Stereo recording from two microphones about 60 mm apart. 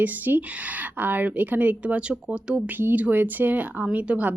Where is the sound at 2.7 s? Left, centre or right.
Right.